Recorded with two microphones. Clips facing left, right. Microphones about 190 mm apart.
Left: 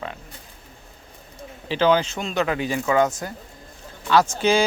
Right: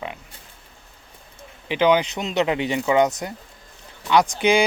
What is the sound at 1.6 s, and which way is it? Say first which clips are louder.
A man's voice: right 1 dB; 15° right (ahead or behind).